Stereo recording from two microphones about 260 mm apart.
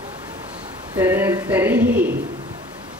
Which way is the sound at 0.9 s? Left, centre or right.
Centre.